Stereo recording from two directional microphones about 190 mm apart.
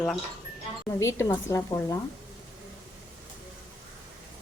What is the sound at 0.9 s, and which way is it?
Speech, 15° left (ahead or behind).